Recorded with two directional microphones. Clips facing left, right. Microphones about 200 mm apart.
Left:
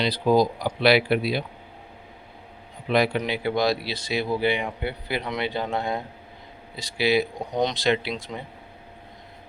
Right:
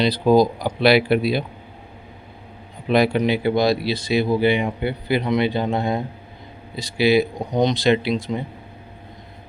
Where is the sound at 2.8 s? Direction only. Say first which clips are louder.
Right 4 dB; 25° right (ahead or behind).